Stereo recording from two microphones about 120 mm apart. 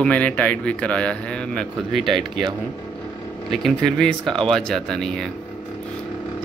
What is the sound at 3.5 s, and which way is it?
Speech, 5° left (ahead or behind).